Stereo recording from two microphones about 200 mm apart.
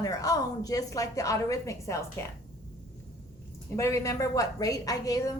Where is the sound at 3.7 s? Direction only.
15° left (ahead or behind).